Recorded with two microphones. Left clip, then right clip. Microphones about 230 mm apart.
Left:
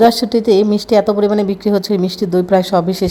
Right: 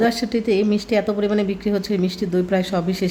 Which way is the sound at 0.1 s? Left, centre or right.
Centre.